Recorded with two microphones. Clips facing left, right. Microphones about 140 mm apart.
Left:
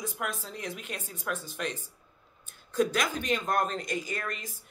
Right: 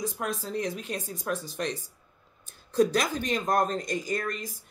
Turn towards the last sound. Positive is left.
turn(degrees=-40)  # may be behind; listen again after turning